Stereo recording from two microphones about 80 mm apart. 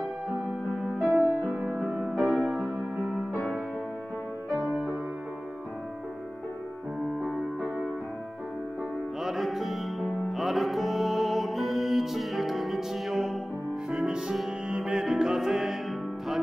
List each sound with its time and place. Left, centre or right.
0.8 s music: centre
4.6 s music: centre
7.2 s music: centre
9.2 s music: centre